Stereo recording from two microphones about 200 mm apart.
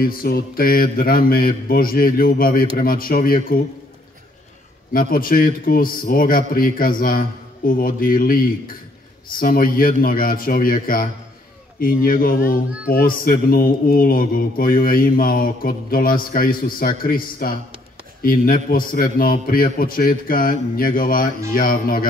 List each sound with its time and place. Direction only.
0.0 s a man's voice: 45° left (ahead or behind)
4.9 s a man's voice: 45° left (ahead or behind)